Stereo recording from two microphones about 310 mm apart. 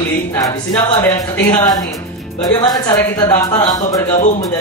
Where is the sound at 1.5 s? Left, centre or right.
Centre.